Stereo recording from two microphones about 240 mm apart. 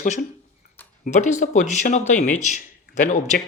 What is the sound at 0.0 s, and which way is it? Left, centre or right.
Speech, left.